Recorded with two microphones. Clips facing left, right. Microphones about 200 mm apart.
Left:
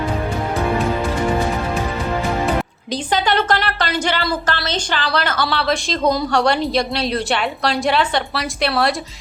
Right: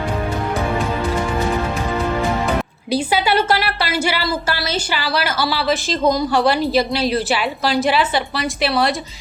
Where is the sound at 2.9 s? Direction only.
10° right (ahead or behind).